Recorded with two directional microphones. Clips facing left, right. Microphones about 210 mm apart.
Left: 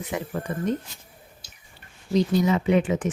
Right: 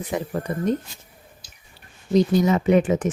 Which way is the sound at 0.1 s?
35° right (ahead or behind).